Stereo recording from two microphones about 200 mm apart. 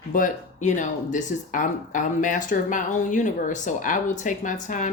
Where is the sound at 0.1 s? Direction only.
40° left (ahead or behind).